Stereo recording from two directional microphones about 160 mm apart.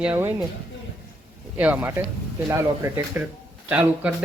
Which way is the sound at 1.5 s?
10° right (ahead or behind).